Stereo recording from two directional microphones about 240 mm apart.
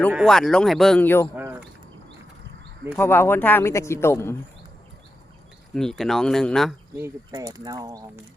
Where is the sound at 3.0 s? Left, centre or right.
Centre.